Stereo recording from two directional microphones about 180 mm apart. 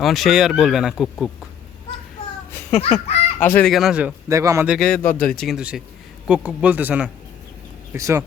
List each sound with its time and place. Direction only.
0.0 s speech: centre (ahead or behind)
2.7 s a child's voice: 40° left (ahead or behind)
3.4 s speech: 10° left (ahead or behind)
4.3 s speech: 15° right (ahead or behind)
4.7 s speech: centre (ahead or behind); by 8.2 s 15° right (ahead or behind)